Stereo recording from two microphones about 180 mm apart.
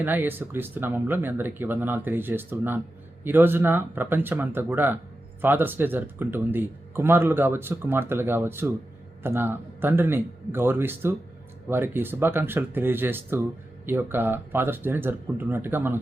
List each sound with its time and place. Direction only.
0.0 s speech: 10° right (ahead or behind)